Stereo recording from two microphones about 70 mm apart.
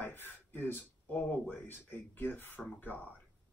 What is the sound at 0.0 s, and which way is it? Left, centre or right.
Speech, left.